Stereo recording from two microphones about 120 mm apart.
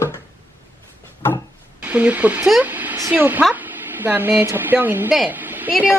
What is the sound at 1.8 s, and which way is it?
Speech, 10° right (ahead or behind).